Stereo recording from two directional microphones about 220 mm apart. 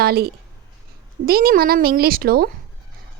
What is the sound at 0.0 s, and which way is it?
A woman's voice, 45° right (ahead or behind).